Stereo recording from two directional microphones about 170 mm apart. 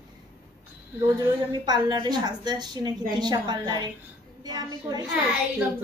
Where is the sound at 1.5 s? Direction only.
25° right (ahead or behind).